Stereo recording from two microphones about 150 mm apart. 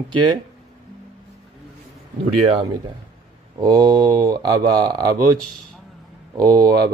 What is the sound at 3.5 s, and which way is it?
Speech, 25° right (ahead or behind).